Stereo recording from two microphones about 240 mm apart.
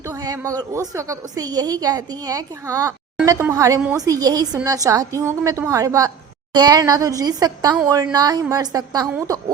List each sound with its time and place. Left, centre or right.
0.0 s a woman's voice: centre